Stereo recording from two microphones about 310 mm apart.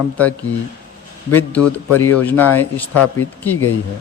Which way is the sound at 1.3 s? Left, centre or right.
Centre.